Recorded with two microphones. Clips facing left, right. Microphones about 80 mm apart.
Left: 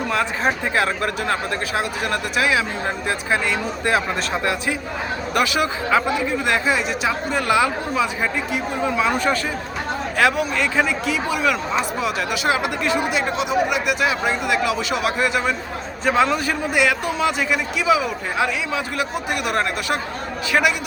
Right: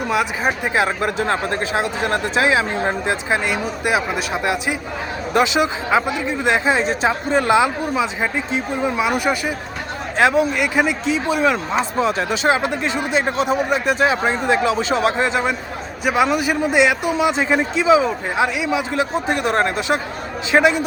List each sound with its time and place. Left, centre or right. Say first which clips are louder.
0.1 s speech: right 2 dB; centre
16.0 s speech: right 1 dB; centre